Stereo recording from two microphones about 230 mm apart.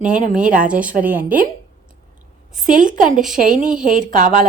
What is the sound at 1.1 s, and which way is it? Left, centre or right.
Speech, right.